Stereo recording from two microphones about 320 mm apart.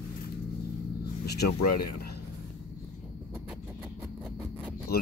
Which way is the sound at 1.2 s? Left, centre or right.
Left.